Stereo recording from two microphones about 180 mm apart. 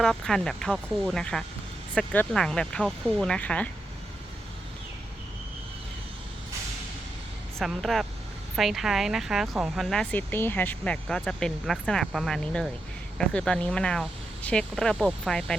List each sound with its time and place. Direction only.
0.0 s speech: centre (ahead or behind)
7.6 s speech: centre (ahead or behind)